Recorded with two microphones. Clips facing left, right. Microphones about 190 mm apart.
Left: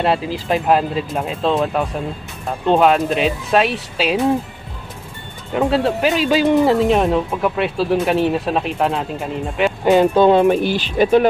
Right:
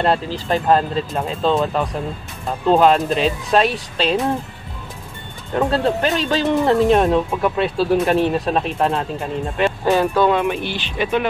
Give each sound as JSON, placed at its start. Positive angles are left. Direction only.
{"t": 0.0, "sound": "speech", "side_deg": 5}
{"t": 5.5, "sound": "speech", "side_deg": 5}
{"t": 6.7, "sound": "speech", "side_deg": 0}
{"t": 9.8, "sound": "speech", "side_deg": 20}